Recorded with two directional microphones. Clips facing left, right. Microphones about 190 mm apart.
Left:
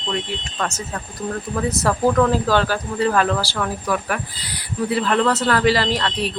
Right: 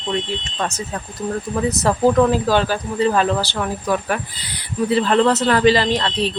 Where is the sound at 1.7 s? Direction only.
20° right (ahead or behind).